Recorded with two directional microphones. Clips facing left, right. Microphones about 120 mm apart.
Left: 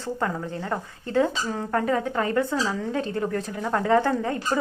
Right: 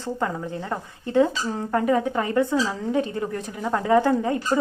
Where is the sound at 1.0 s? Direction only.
20° right (ahead or behind).